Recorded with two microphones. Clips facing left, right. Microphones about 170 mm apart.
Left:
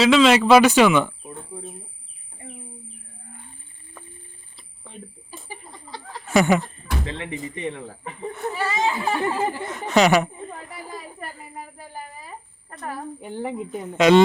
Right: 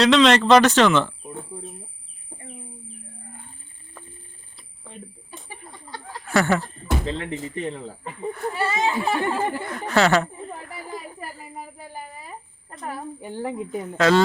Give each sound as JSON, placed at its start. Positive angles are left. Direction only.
{"t": 0.0, "sound": "speech", "side_deg": 5}
{"t": 1.2, "sound": "bird", "side_deg": 0}
{"t": 4.8, "sound": "a sound", "side_deg": 0}
{"t": 6.3, "sound": "speech", "side_deg": 15}
{"t": 6.6, "sound": "speech", "side_deg": 0}
{"t": 9.9, "sound": "speech", "side_deg": 15}
{"t": 10.3, "sound": "chatter", "side_deg": 0}
{"t": 11.2, "sound": "speech", "side_deg": 0}
{"t": 12.8, "sound": "speech", "side_deg": -5}
{"t": 13.8, "sound": "speech", "side_deg": 15}